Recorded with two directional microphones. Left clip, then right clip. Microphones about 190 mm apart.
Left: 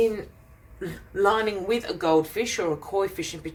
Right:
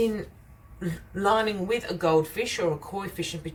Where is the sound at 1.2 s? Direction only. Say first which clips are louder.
Left 1 dB; 35° left (ahead or behind).